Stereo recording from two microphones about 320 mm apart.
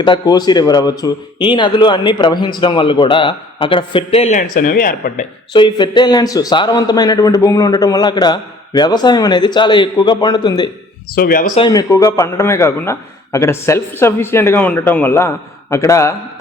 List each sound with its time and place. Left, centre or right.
0.0 s speech: centre
5.5 s speech: centre
11.1 s speech: left; by 16.1 s centre